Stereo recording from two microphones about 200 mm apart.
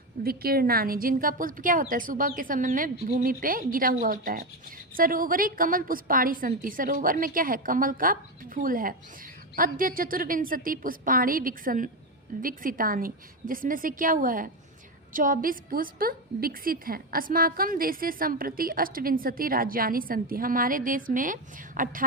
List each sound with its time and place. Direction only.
0.2 s a woman's voice: 50° right (ahead or behind)